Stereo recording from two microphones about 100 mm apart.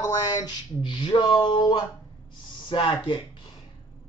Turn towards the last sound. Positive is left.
turn(degrees=55)  # may be behind; listen again after turning